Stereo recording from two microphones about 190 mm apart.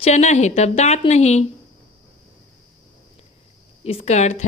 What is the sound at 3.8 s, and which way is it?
Speech, 30° left (ahead or behind).